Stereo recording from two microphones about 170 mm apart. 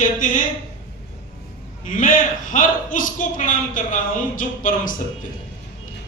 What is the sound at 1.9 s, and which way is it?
A man's voice, 50° left (ahead or behind).